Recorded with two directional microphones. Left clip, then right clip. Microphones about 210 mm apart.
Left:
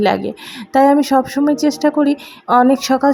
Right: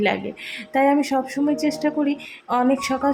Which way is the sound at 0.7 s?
20° left (ahead or behind).